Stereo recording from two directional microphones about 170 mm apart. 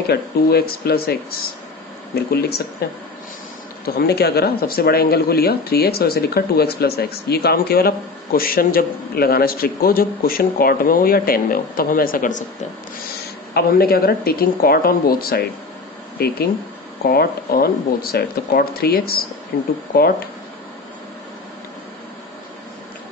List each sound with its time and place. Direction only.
0.1 s speech: 70° left (ahead or behind)
2.1 s speech: 70° left (ahead or behind); by 12.4 s 50° left (ahead or behind)
13.5 s speech: 65° left (ahead or behind)